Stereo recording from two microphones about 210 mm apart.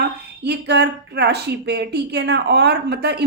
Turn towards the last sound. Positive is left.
turn(degrees=-50)  # may be behind; listen again after turning